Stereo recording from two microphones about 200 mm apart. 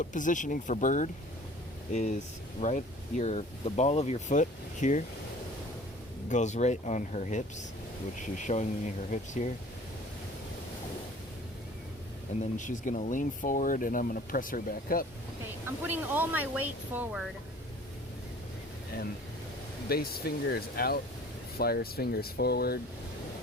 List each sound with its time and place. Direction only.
0.0 s speech: 40° left (ahead or behind)
6.2 s speech: 35° left (ahead or behind)
12.4 s speech: 40° left (ahead or behind)
15.6 s speech: 10° right (ahead or behind)
19.9 s speech: 50° left (ahead or behind)